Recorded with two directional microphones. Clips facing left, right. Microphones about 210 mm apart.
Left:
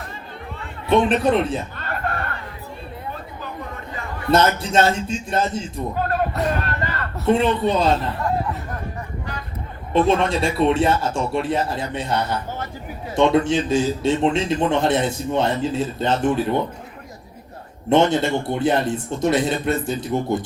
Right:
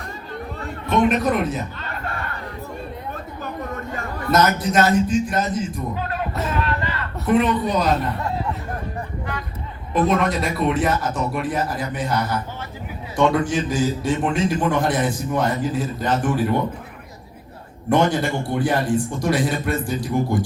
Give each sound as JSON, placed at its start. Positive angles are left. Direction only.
{"t": 0.9, "sound": "a man's voice", "side_deg": 30}
{"t": 1.8, "sound": "a sound", "side_deg": 50}
{"t": 3.4, "sound": "chatter", "side_deg": -45}
{"t": 4.3, "sound": "a man's voice", "side_deg": 30}
{"t": 6.0, "sound": "music", "side_deg": 50}
{"t": 6.6, "sound": "a sound", "side_deg": 45}
{"t": 7.3, "sound": "a man's voice", "side_deg": 25}
{"t": 9.9, "sound": "a man's voice", "side_deg": 30}
{"t": 17.8, "sound": "a man's voice", "side_deg": 25}